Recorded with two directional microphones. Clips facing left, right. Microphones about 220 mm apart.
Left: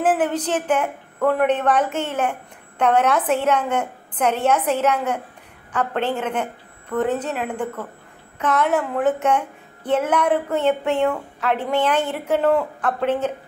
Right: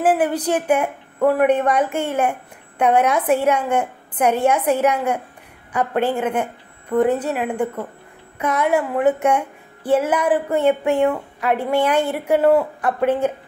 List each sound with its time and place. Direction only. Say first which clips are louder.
0.0 s a woman's voice: right 2 dB; 10° right (ahead or behind)